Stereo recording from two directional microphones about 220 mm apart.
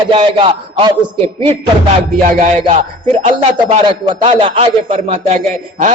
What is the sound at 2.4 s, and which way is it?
A man's voice, 30° right (ahead or behind).